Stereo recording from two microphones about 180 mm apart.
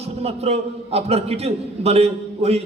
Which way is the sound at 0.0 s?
35° right (ahead or behind).